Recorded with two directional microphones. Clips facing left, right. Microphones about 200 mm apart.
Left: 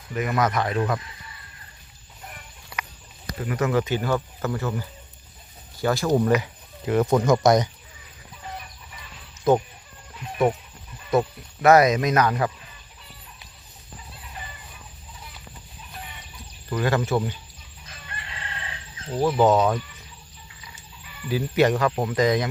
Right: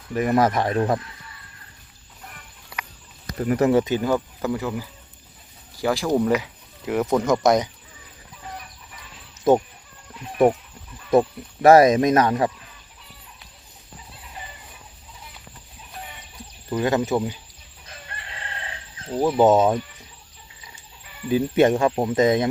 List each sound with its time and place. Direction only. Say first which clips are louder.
0.1 s speech: right 4 dB; 35° right (ahead or behind)
3.3 s speech: right 5 dB; 40° right (ahead or behind); by 7.7 s 5° right (ahead or behind)
11.1 s speech: right 4 dB; 30° right (ahead or behind)
16.6 s speech: right 2 dB; 20° right (ahead or behind)
18.1 s chicken: even; 40° right (ahead or behind)
19.1 s speech: right 2 dB; 20° right (ahead or behind)
21.2 s speech: right 3 dB; 25° right (ahead or behind)